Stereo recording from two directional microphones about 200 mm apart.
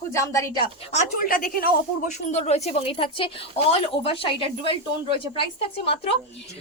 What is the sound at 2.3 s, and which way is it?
A woman's voice, 30° left (ahead or behind).